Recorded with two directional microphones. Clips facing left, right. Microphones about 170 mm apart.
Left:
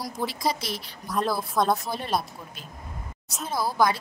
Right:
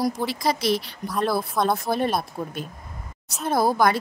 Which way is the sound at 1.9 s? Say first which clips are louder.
Right 5 dB; 55° right (ahead or behind).